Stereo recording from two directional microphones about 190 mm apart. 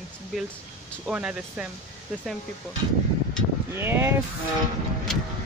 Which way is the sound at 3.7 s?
15° right (ahead or behind).